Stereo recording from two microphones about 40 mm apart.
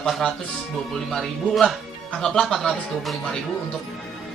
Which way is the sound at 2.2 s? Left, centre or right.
Centre.